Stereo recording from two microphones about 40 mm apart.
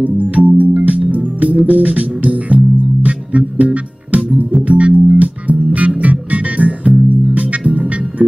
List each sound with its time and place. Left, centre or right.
0.0 s music: right